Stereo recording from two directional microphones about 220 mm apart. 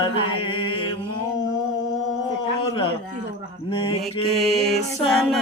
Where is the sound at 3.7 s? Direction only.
20° left (ahead or behind).